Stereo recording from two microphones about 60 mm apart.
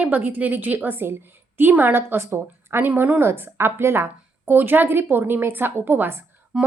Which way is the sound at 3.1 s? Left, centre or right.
Right.